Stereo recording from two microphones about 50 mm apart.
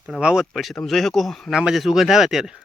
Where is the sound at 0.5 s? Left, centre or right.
Centre.